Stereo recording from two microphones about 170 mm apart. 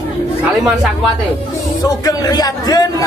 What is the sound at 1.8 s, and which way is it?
Speech, 20° left (ahead or behind).